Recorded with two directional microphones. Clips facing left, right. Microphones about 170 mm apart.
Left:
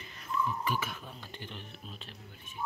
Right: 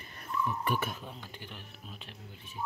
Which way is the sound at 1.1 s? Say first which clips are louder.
Even; 10° right (ahead or behind).